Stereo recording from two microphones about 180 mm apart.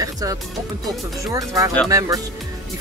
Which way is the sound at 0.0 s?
20° right (ahead or behind).